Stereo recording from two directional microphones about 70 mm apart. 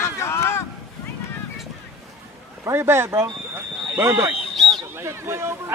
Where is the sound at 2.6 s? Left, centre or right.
Right.